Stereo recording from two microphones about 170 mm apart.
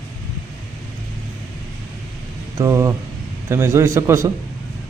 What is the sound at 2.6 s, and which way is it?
A man's voice, 20° right (ahead or behind).